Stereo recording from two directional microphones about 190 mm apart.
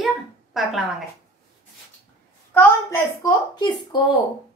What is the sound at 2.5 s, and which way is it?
A woman's voice, 15° left (ahead or behind).